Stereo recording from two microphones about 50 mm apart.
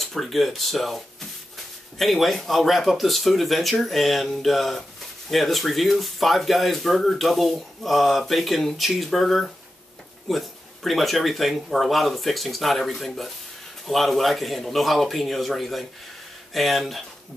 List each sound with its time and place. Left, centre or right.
0.0 s speech: centre